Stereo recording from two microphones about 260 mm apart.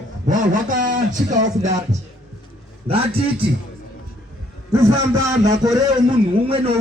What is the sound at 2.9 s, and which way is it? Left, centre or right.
Speech, right.